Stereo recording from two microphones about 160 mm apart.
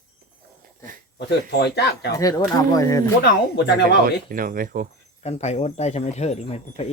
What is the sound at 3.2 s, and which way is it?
Speech, 90° left.